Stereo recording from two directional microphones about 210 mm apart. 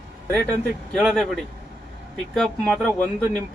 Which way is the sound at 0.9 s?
Centre (ahead or behind).